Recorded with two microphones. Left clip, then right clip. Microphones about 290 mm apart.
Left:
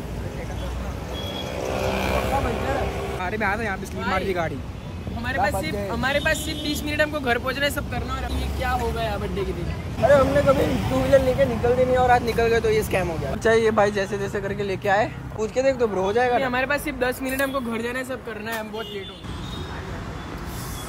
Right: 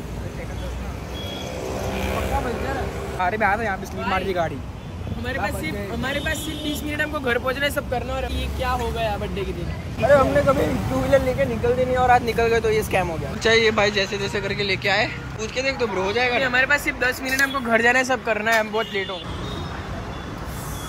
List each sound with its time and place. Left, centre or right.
2.4 s speech: centre
5.6 s speech: centre
16.3 s a man's voice: left
17.9 s speech: centre